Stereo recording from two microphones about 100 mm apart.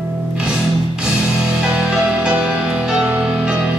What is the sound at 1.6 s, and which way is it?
Music, 5° right (ahead or behind).